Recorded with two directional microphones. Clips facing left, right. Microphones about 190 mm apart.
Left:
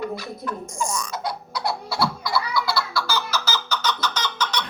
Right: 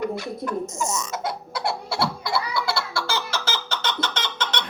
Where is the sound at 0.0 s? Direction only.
20° right (ahead or behind).